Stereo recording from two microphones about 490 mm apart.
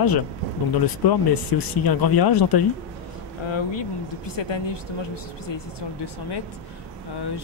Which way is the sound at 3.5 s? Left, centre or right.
Left.